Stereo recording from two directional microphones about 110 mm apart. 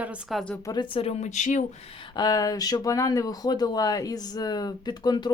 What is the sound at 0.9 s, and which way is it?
Speech, 80° left.